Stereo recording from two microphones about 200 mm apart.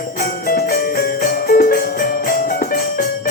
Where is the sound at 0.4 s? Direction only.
45° left (ahead or behind).